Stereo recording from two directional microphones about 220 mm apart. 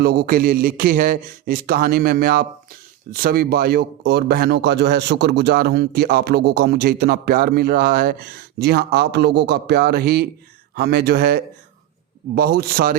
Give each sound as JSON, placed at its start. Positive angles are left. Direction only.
{"t": 0.0, "sound": "a man's voice", "side_deg": -45}